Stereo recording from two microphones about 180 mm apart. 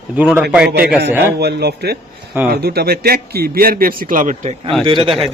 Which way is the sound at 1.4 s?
65° right (ahead or behind).